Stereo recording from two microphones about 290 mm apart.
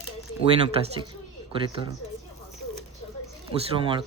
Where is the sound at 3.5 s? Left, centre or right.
Centre.